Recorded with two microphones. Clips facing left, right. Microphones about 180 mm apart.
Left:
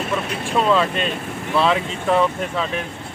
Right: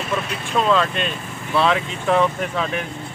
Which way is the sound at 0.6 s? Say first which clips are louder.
Left 1 dB; 5° left (ahead or behind).